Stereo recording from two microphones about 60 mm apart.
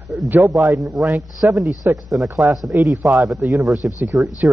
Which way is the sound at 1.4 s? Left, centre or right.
Right.